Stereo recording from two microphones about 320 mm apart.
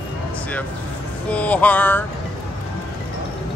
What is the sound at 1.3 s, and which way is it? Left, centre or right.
Speech, centre.